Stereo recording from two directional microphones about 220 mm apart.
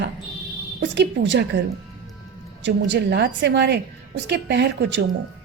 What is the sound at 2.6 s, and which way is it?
A woman's voice, 55° right (ahead or behind).